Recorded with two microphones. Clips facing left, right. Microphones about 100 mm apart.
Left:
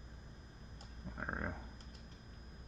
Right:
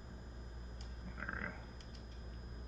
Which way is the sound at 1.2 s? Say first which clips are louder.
Left 3 dB; 25° left (ahead or behind).